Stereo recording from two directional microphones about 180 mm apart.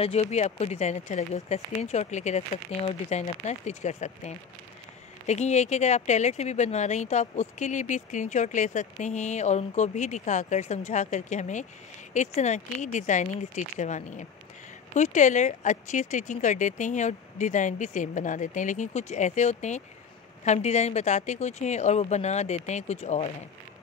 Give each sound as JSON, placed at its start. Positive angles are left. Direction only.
{"t": 0.0, "sound": "speech", "side_deg": 35}